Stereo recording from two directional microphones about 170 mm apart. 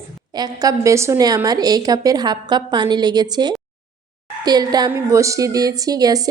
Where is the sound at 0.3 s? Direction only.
25° right (ahead or behind).